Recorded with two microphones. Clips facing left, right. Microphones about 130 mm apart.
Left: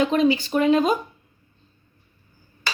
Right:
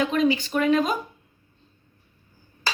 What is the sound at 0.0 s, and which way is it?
Speech, 30° left (ahead or behind).